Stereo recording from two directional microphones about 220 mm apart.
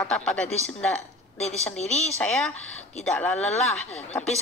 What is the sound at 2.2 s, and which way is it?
A woman's voice, 5° left (ahead or behind).